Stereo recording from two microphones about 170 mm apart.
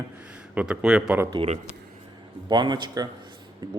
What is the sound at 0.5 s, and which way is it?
Speech, 5° right (ahead or behind).